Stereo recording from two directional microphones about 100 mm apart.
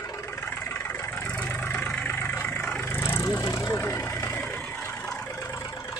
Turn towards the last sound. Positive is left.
turn(degrees=25)  # may be behind; listen again after turning